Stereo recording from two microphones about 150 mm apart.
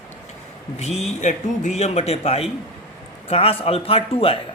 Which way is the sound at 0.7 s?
45° left (ahead or behind).